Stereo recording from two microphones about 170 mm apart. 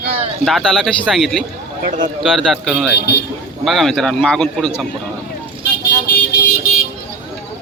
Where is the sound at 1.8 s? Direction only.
50° right (ahead or behind).